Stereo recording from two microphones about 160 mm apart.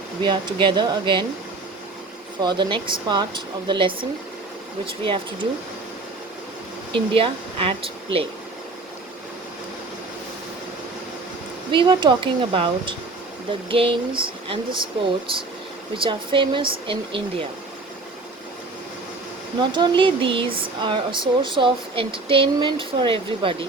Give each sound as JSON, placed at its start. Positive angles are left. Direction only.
{"t": 0.2, "sound": "speech", "side_deg": -30}
{"t": 2.4, "sound": "speech", "side_deg": -30}
{"t": 5.0, "sound": "speech", "side_deg": -35}
{"t": 6.9, "sound": "speech", "side_deg": -35}
{"t": 11.7, "sound": "speech", "side_deg": -30}
{"t": 16.0, "sound": "speech", "side_deg": -30}
{"t": 19.7, "sound": "speech", "side_deg": -30}